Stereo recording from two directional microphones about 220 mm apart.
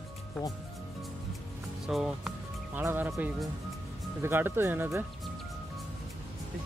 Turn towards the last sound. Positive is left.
turn(degrees=-10)  # may be behind; listen again after turning